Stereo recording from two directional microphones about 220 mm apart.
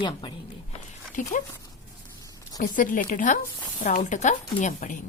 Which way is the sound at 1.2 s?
35° left (ahead or behind).